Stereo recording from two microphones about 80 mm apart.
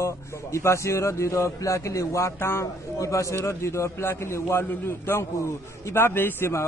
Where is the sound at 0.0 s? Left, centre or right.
Left.